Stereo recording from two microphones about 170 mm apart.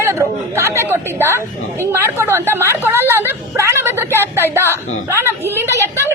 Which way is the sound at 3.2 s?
15° right (ahead or behind).